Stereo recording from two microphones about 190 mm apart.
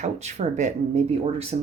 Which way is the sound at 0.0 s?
35° right (ahead or behind).